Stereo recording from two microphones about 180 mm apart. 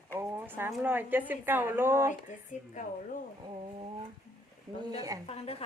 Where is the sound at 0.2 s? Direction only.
10° right (ahead or behind).